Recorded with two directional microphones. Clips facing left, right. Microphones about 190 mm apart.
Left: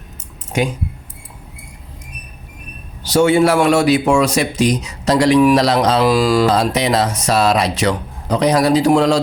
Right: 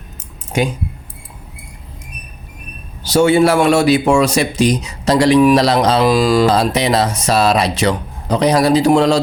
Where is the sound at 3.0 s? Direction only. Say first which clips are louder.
Right 1 dB; 30° right (ahead or behind).